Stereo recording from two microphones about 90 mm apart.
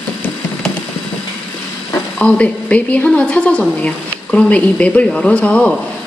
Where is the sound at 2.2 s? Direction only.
15° left (ahead or behind).